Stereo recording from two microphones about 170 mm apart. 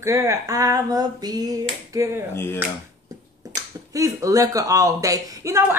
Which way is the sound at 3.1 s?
20° right (ahead or behind).